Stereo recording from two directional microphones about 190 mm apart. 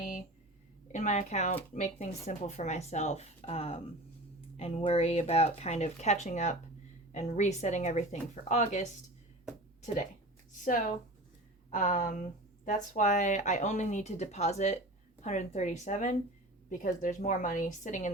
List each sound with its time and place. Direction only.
0.9 s speech: 40° left (ahead or behind)
10.6 s speech: 45° left (ahead or behind)